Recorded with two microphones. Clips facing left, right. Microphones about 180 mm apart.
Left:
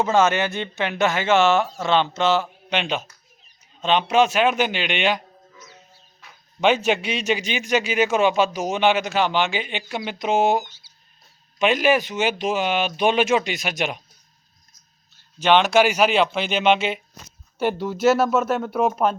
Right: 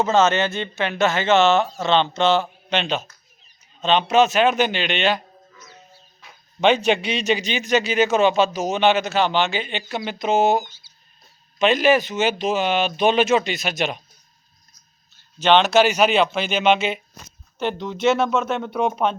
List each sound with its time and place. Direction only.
0.0 s a man's voice: 15° left (ahead or behind)
6.6 s a man's voice: 5° left (ahead or behind)
11.6 s a man's voice: 10° left (ahead or behind)
15.4 s a man's voice: 10° left (ahead or behind)